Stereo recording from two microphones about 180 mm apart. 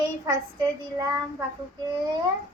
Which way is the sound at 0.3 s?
20° right (ahead or behind).